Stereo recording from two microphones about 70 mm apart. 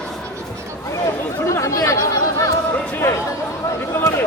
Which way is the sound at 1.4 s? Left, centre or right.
Left.